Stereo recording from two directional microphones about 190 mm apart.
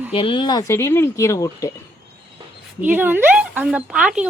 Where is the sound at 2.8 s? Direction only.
10° right (ahead or behind).